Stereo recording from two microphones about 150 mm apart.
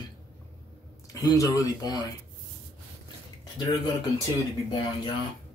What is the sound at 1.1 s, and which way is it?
Speech, 25° left (ahead or behind).